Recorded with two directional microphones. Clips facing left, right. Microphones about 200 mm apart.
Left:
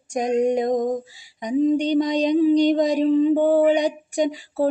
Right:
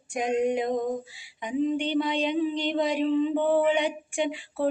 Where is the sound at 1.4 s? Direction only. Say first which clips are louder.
Left 7 dB; 40° left (ahead or behind).